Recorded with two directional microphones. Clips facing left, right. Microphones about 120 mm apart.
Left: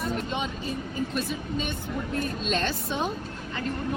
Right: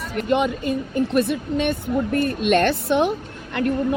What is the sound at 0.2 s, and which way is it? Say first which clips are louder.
A woman's voice: right 10 dB; 70° right (ahead or behind).